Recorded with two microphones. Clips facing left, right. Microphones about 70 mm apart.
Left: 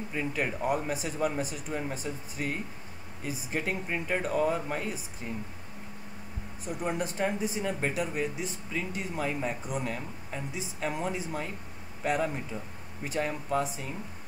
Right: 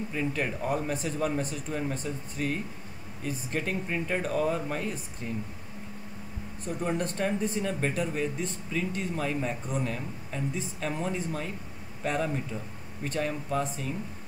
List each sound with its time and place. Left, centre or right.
0.1 s speech: centre
1.7 s speech: left
6.6 s speech: centre
9.9 s speech: centre